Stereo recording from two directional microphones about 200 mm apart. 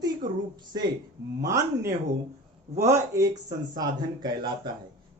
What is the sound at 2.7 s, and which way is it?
Speech, 35° right (ahead or behind).